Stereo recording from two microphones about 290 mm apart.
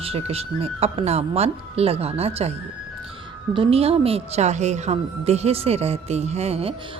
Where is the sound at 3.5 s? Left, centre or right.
Centre.